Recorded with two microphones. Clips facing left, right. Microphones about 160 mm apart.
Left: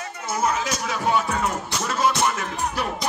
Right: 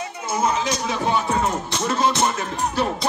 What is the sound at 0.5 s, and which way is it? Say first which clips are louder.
Music: right 2 dB; 25° right (ahead or behind).